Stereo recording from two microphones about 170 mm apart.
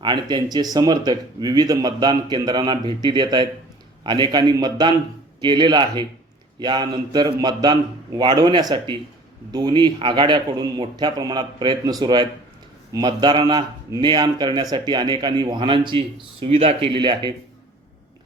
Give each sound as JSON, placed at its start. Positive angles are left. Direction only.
{"t": 0.0, "sound": "a man's voice", "side_deg": -25}